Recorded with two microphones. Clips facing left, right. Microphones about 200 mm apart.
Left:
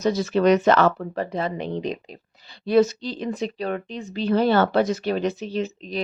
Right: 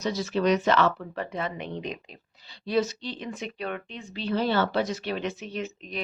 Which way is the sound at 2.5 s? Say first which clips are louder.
Left 8 dB; 50° left (ahead or behind).